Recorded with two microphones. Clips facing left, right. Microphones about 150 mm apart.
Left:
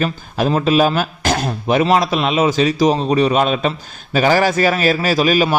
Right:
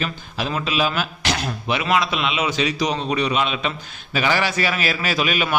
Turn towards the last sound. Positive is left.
turn(degrees=35)  # may be behind; listen again after turning